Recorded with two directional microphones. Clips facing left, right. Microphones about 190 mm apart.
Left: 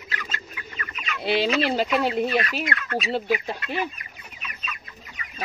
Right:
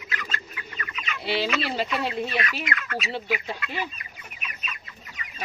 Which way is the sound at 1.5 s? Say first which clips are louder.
Left 5 dB; 45° left (ahead or behind).